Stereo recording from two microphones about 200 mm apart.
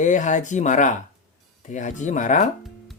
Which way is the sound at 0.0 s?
40° left (ahead or behind).